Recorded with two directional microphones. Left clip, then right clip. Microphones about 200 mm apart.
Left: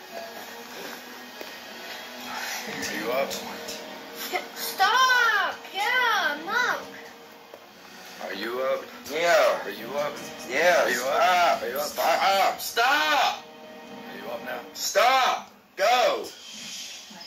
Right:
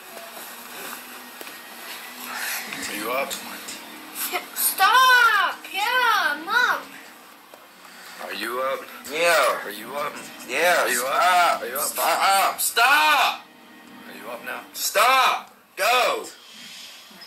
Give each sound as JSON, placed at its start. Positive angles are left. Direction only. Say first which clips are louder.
{"t": 2.4, "sound": "a sound", "louder": "right 2 dB", "side_deg": -45}
{"t": 8.3, "sound": "speech", "louder": "right 1 dB", "side_deg": -45}
{"t": 10.5, "sound": "speech", "louder": "right 1 dB", "side_deg": -45}
{"t": 14.8, "sound": "speech", "louder": "right 3 dB", "side_deg": -45}